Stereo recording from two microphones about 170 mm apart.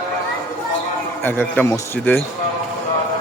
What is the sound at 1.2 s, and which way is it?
Speech, 10° left (ahead or behind).